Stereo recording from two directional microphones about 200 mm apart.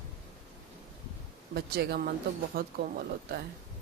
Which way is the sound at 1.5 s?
50° right (ahead or behind).